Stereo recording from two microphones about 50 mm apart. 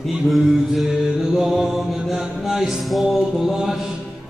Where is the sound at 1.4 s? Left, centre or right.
Centre.